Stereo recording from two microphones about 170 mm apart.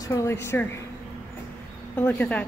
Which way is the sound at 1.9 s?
10° left (ahead or behind).